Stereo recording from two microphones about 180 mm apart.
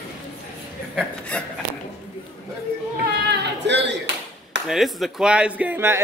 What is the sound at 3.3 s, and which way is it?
Clapping, 75° right (ahead or behind).